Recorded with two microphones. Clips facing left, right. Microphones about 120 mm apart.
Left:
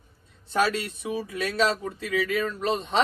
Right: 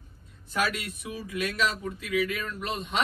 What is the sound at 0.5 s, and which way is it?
Speech, 30° left (ahead or behind).